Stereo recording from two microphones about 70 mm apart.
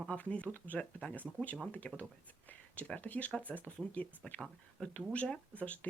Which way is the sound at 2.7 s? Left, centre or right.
Left.